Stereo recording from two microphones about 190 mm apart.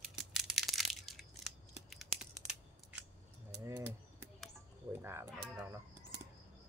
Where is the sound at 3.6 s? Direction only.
15° right (ahead or behind).